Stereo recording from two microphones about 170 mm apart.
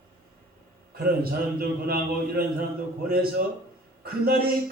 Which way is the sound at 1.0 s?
60° right (ahead or behind).